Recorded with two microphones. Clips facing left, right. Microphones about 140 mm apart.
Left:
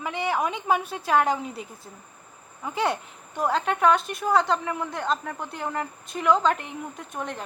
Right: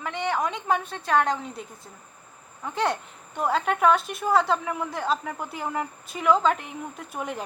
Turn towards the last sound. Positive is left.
turn(degrees=-5)  # may be behind; listen again after turning